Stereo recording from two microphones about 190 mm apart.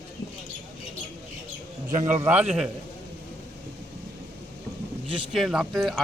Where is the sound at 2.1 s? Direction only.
10° right (ahead or behind).